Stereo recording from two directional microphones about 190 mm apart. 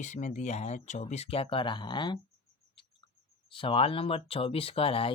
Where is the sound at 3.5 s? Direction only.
25° left (ahead or behind).